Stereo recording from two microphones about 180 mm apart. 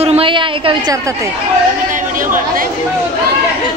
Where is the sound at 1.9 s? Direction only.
50° right (ahead or behind).